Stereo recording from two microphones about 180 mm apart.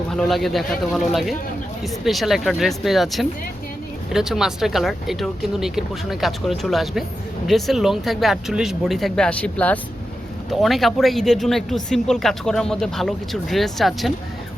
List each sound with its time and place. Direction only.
0.1 s speech: centre (ahead or behind)